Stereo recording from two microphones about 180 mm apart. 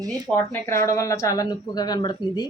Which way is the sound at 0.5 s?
15° left (ahead or behind).